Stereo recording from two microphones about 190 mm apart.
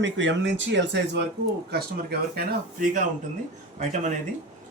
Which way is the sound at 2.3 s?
50° right (ahead or behind).